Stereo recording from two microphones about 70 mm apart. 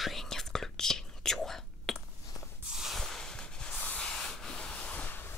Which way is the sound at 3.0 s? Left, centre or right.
Centre.